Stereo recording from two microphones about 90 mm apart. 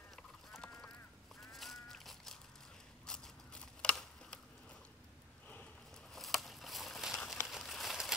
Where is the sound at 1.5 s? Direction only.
Centre (ahead or behind).